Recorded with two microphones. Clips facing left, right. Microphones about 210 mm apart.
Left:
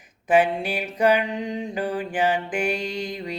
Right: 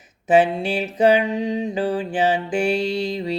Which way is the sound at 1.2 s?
20° right (ahead or behind).